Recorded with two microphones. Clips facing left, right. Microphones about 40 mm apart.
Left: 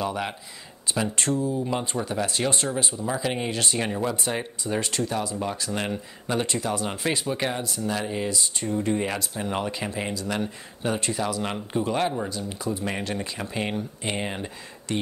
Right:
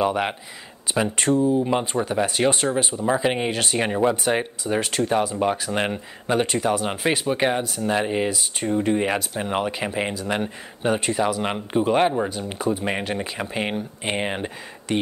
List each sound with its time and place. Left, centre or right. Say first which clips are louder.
0.0 s speech: right 6 dB; right
5.0 s speech: right 5 dB; centre
5.3 s speech: right 6 dB; right
6.2 s speech: right 6 dB; centre
12.4 s speech: right 5 dB; right